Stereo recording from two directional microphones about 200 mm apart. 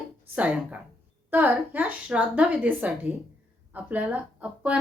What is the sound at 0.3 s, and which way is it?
A woman's voice, 5° right (ahead or behind).